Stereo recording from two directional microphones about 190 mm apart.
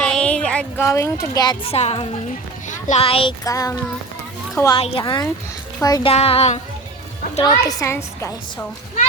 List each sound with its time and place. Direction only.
0.0 s speech: 5° left (ahead or behind); by 3.3 s 30° left (ahead or behind)
3.4 s a woman's voice: 15° left (ahead or behind)
6.1 s speech: 30° left (ahead or behind)
7.4 s a woman's voice: 20° left (ahead or behind)